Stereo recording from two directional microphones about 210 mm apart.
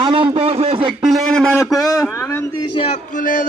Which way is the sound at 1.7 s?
15° left (ahead or behind).